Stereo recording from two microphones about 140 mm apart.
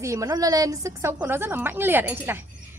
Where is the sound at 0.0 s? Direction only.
25° right (ahead or behind).